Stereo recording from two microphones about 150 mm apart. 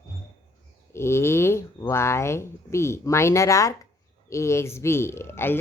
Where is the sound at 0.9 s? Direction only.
15° left (ahead or behind).